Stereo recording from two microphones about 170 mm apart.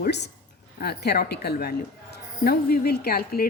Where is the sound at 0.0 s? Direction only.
80° left.